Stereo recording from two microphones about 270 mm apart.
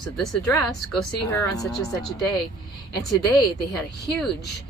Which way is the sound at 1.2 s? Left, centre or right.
Centre.